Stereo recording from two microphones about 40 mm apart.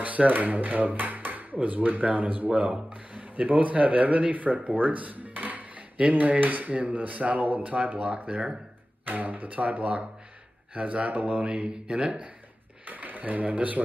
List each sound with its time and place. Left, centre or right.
0.0 s speech: right
6.1 s speech: right
9.0 s speech: right
11.4 s speech: right
12.8 s speech: right